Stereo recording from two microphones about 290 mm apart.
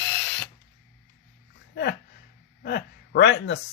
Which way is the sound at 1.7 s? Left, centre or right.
Left.